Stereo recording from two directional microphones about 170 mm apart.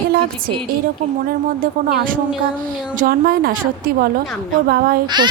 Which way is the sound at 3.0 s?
65° right (ahead or behind).